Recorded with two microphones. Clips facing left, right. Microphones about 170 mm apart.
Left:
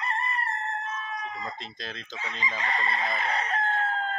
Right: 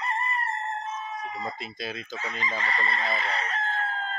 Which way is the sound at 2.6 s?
15° left (ahead or behind).